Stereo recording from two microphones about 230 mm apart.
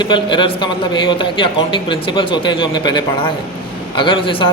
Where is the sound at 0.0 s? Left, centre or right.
Left.